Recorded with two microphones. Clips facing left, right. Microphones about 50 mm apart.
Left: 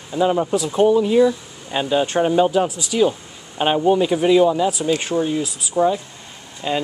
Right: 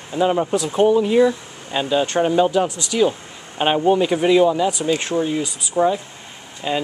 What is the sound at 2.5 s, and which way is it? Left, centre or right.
Speech, centre.